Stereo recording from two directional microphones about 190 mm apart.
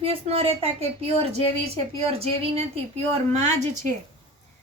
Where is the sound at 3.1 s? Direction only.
40° right (ahead or behind).